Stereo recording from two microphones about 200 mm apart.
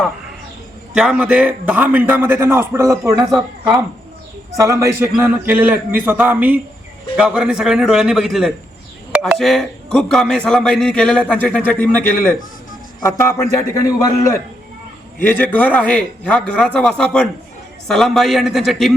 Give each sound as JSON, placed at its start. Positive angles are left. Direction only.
{"t": 0.9, "sound": "a man's voice", "side_deg": -5}
{"t": 15.2, "sound": "speech", "side_deg": 10}